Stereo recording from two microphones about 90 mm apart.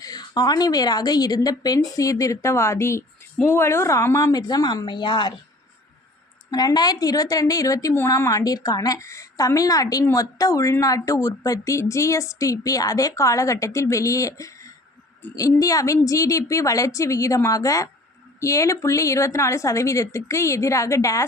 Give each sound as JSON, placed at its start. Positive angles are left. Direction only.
{"t": 0.0, "sound": "a woman's voice", "side_deg": 50}
{"t": 6.5, "sound": "a woman's voice", "side_deg": 45}